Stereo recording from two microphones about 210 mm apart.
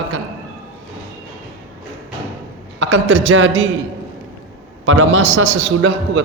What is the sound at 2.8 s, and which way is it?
Speech, 70° right (ahead or behind).